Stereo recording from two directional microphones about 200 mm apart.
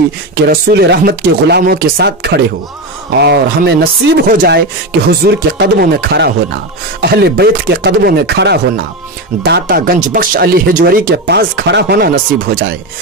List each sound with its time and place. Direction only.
0.5 s speech: 55° right (ahead or behind)